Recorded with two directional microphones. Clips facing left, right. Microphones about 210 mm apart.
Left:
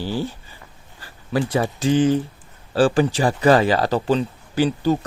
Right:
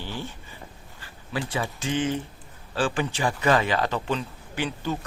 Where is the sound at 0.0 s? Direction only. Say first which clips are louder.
Left 9 dB; 35° left (ahead or behind).